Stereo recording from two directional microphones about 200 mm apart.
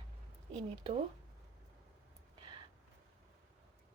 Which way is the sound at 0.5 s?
30° right (ahead or behind).